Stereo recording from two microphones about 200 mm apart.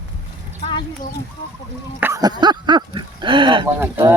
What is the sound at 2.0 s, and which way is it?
Speech, 15° right (ahead or behind).